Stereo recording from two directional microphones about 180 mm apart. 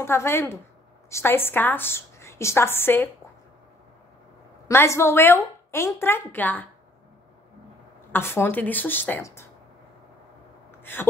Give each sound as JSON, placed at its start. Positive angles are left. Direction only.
{"t": 0.0, "sound": "a woman's voice", "side_deg": 15}
{"t": 4.6, "sound": "a woman's voice", "side_deg": 15}
{"t": 8.1, "sound": "a woman's voice", "side_deg": 15}
{"t": 10.8, "sound": "a sound", "side_deg": 10}